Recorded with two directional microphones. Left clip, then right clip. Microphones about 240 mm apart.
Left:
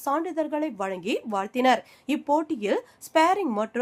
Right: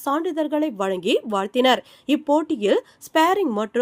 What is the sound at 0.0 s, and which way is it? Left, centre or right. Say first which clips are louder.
Speech: right 3 dB; centre.